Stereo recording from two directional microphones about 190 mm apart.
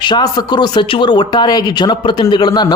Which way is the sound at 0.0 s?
25° left (ahead or behind).